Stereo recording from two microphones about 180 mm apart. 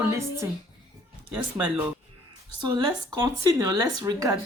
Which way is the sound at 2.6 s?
20° right (ahead or behind).